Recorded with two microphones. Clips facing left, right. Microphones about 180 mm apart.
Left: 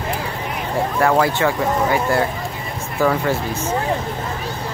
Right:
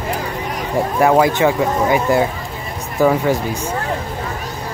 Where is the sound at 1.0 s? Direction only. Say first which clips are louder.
Right 4 dB; 15° right (ahead or behind).